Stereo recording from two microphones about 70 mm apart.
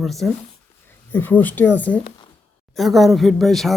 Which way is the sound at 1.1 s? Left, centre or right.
Left.